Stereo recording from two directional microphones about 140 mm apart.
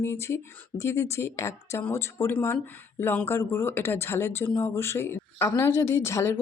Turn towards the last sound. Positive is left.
turn(degrees=20)  # may be behind; listen again after turning